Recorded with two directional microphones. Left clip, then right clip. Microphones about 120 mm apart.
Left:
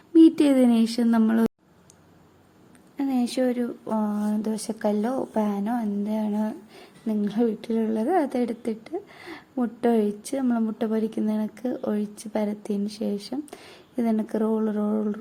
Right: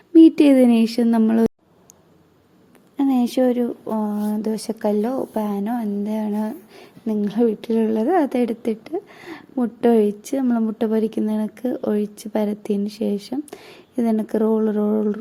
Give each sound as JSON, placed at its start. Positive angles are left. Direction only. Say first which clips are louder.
{"t": 0.1, "sound": "a woman's voice", "louder": "right 5 dB", "side_deg": -30}
{"t": 3.0, "sound": "speech", "louder": "right 6 dB", "side_deg": -35}